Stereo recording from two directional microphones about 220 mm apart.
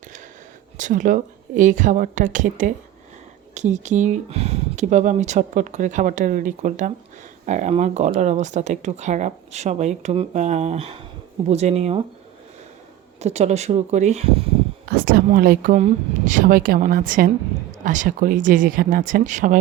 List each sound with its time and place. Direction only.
0.8 s speech: 35° right (ahead or behind)
13.1 s speech: 30° right (ahead or behind)
14.8 s speech: 45° right (ahead or behind)